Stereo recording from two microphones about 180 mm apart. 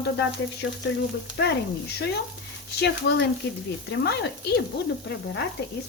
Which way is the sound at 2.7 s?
70° left (ahead or behind).